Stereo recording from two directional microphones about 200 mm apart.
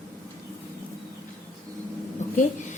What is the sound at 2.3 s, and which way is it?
Speech, 40° left (ahead or behind).